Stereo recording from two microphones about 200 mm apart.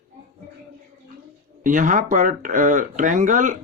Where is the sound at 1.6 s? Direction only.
40° right (ahead or behind).